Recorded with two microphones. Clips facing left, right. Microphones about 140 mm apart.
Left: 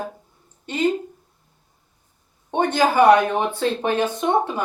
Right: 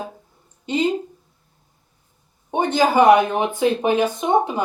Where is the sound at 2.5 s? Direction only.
15° right (ahead or behind).